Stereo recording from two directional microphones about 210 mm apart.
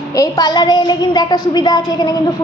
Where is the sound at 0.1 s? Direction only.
20° left (ahead or behind).